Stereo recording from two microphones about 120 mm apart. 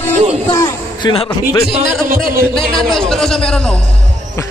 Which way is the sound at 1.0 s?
55° left (ahead or behind).